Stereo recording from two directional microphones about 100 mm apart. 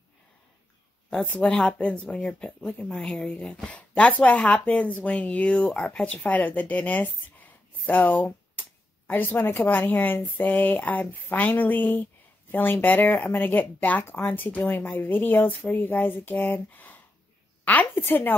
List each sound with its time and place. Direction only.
1.2 s speech: 10° left (ahead or behind)